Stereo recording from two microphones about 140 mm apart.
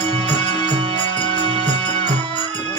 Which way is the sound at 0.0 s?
35° left (ahead or behind).